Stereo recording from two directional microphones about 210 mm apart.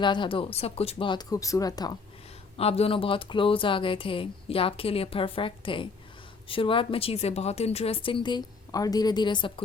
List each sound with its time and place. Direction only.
0.0 s speech: 20° left (ahead or behind)
2.6 s speech: 30° left (ahead or behind)